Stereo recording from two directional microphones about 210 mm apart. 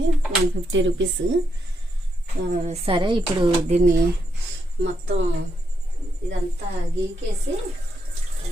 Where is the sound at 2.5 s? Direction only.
30° right (ahead or behind).